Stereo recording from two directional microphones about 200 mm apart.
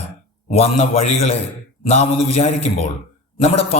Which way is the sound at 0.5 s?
30° left (ahead or behind).